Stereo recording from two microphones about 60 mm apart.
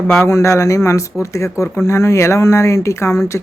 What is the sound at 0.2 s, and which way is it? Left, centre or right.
Speech, left.